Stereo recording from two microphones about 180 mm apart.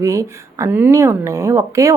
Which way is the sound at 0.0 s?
15° right (ahead or behind).